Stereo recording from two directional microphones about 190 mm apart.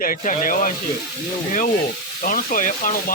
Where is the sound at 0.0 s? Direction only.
45° left (ahead or behind).